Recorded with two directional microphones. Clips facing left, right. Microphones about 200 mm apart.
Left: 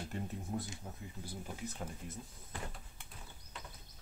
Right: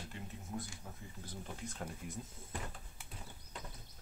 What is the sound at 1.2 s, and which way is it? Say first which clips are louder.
Speech: left 2 dB; 10° left (ahead or behind).